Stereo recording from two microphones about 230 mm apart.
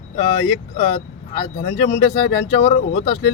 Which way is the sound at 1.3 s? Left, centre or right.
Left.